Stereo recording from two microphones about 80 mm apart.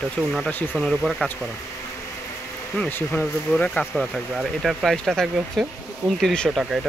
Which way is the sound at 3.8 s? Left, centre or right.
Centre.